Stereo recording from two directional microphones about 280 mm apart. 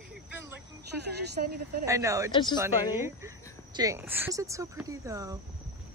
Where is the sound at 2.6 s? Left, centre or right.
Centre.